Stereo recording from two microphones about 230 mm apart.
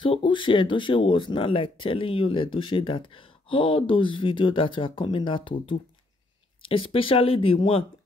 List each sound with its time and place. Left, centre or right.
0.0 s speech: left
6.6 s speech: left